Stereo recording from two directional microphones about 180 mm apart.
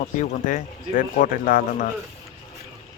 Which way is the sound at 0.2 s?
45° left (ahead or behind).